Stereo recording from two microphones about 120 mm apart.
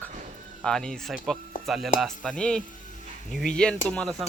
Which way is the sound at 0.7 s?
5° left (ahead or behind).